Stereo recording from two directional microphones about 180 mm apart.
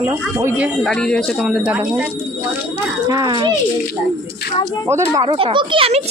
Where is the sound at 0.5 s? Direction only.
10° right (ahead or behind).